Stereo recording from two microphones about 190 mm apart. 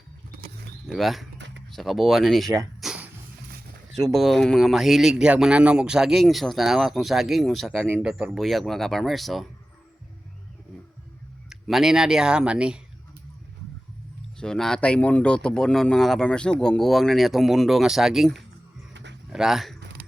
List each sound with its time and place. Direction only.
0.9 s speech: centre (ahead or behind)
1.4 s a sound: 70° right (ahead or behind)
1.7 s speech: centre (ahead or behind)
2.8 s a sound: 5° right (ahead or behind)
4.1 s speech: centre (ahead or behind)
11.4 s speech: centre (ahead or behind)
14.3 s speech: 5° left (ahead or behind)